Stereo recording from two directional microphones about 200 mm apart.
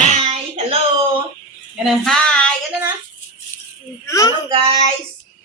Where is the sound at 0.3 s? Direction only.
30° right (ahead or behind).